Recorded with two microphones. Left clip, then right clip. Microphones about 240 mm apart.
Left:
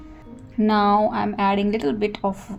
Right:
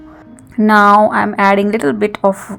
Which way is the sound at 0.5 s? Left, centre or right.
Right.